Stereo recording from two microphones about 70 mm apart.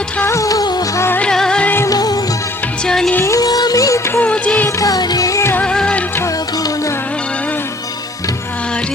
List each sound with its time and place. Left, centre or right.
0.3 s music: left
0.9 s music: left
1.2 s music: centre
1.9 s music: left
2.8 s music: centre
3.2 s music: left
4.2 s music: centre
4.8 s music: left
5.6 s music: centre